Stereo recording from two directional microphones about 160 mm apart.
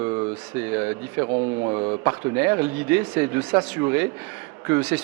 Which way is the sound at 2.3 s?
15° right (ahead or behind).